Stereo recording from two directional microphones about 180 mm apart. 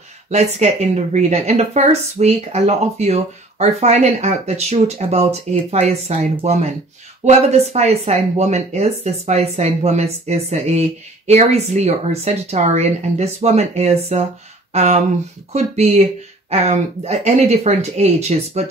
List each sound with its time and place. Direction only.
0.3 s speech: 40° right (ahead or behind)